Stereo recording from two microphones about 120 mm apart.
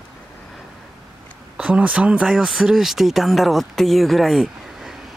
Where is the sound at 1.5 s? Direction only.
10° right (ahead or behind).